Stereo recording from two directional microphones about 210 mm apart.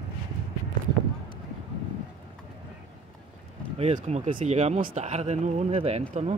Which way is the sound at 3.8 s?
30° right (ahead or behind).